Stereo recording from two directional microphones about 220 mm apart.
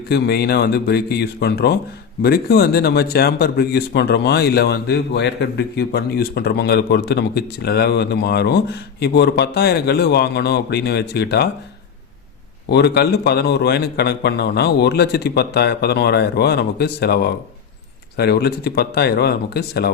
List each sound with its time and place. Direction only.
0.1 s speech: 45° left (ahead or behind)
12.6 s speech: 50° left (ahead or behind)